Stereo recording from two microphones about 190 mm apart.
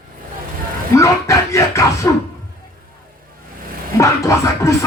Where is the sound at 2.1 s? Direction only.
15° left (ahead or behind).